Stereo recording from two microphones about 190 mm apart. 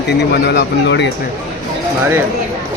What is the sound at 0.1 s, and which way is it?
Speech, 60° left (ahead or behind).